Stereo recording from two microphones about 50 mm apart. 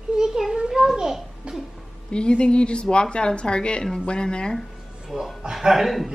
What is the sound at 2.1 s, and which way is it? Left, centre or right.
A woman's voice, left.